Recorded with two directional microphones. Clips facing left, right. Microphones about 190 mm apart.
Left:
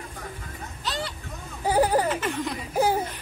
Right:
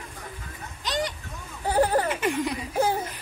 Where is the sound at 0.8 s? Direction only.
15° right (ahead or behind).